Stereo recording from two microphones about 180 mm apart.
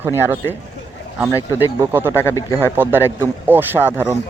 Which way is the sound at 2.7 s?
10° right (ahead or behind).